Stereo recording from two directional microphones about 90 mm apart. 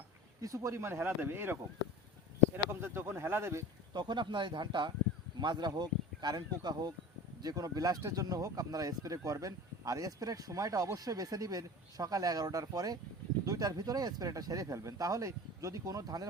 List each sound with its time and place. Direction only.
0.4 s speech: 35° right (ahead or behind)
2.6 s speech: 25° right (ahead or behind)
3.9 s speech: 55° right (ahead or behind)